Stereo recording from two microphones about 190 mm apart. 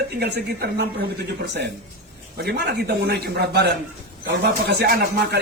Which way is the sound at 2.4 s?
60° right (ahead or behind).